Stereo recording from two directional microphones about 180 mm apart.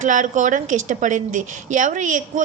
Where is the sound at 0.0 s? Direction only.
45° right (ahead or behind).